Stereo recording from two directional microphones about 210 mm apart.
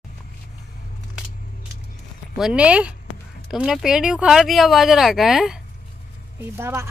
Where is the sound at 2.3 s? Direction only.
5° right (ahead or behind).